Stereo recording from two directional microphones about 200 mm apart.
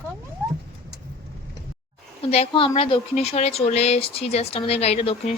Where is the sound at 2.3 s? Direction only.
30° left (ahead or behind).